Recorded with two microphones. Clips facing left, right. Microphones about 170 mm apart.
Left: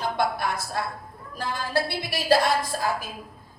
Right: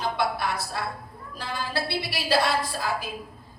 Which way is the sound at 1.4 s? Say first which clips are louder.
Left 4 dB; 45° left (ahead or behind).